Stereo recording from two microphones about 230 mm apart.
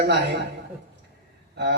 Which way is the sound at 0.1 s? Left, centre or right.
Right.